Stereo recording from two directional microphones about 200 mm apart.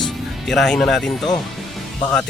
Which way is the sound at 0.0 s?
Centre (ahead or behind).